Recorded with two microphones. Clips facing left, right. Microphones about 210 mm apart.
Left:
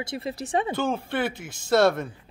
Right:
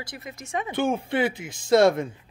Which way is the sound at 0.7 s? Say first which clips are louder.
Right 2 dB; 15° right (ahead or behind).